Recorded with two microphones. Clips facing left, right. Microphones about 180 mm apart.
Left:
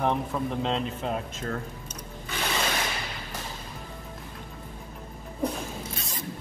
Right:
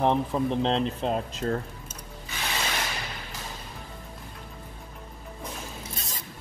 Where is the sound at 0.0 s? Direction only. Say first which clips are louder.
Right 3 dB; 30° right (ahead or behind).